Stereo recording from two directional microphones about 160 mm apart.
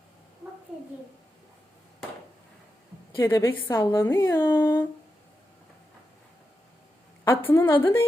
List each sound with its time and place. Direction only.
3.1 s a woman's voice: 20° left (ahead or behind)
7.3 s a woman's voice: 15° left (ahead or behind)